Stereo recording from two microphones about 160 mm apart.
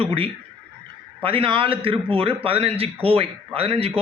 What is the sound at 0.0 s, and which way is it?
A man's voice, 35° right (ahead or behind).